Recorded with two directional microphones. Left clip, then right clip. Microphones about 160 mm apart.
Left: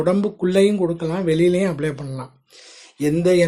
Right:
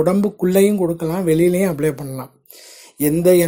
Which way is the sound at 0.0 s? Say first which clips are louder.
Right 2 dB; 40° right (ahead or behind).